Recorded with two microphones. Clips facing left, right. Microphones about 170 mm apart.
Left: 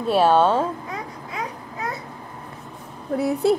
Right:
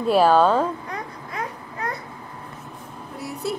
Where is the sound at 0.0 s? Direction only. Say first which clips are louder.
Right 1 dB; centre (ahead or behind).